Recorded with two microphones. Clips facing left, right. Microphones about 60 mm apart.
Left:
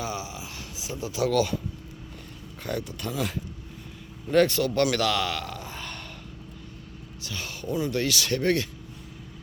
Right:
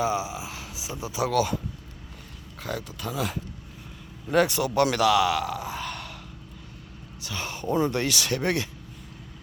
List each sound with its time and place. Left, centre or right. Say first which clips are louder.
0.0 s a man's voice: right 6 dB; centre
2.6 s a man's voice: left 1 dB; centre
7.3 s speech: right 3 dB; right